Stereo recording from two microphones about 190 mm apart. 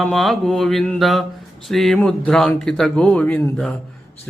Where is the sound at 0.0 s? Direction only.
Centre (ahead or behind).